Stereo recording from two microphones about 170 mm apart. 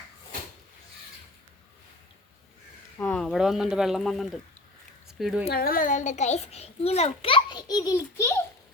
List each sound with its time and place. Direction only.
3.0 s speech: 5° left (ahead or behind)
5.5 s a child's voice: 60° left (ahead or behind); by 8.4 s 15° left (ahead or behind)